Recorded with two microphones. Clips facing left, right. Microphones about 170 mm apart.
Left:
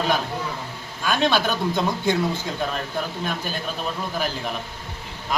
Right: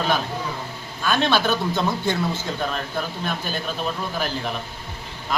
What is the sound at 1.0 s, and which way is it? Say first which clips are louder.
Speech: right 1 dB; 10° left (ahead or behind).